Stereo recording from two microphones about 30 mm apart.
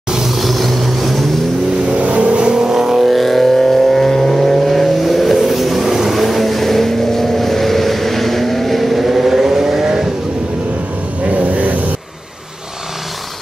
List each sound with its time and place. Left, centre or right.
0.3 s vehicle: centre
2.0 s vehicle: right
2.6 s music: centre
3.4 s vehicle: centre
5.9 s vehicle: centre
11.2 s vehicle: right